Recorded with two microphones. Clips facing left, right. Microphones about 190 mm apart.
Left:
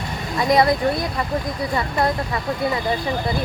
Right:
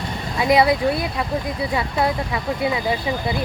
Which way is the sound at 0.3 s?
5° right (ahead or behind).